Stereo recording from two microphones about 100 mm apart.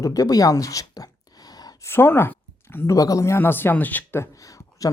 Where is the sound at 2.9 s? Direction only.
35° left (ahead or behind).